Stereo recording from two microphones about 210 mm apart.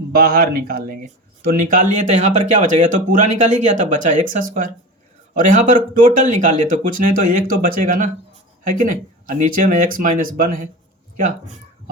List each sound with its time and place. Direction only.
0.1 s speech: 45° right (ahead or behind)